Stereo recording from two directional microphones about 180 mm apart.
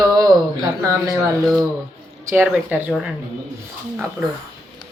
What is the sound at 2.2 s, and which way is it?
Speech, 10° right (ahead or behind).